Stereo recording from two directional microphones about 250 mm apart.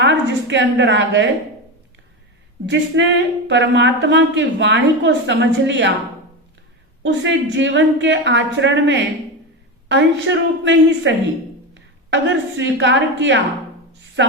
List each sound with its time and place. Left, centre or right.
0.0 s a woman's voice: right
2.6 s speech: right
7.0 s a woman's voice: right